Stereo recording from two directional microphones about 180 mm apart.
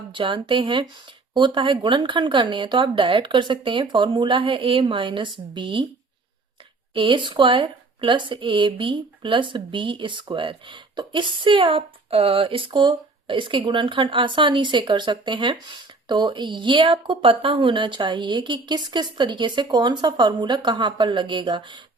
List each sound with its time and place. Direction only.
0.1 s speech: 25° right (ahead or behind)
6.9 s speech: 25° right (ahead or behind)